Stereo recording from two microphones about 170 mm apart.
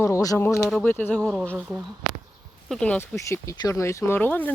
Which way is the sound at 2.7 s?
5° left (ahead or behind).